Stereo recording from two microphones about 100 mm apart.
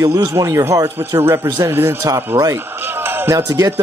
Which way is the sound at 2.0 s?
35° right (ahead or behind).